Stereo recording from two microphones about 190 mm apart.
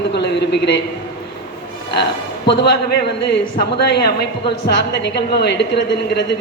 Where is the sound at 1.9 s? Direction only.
60° left (ahead or behind).